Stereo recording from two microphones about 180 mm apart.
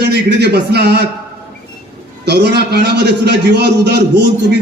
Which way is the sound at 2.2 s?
70° right (ahead or behind).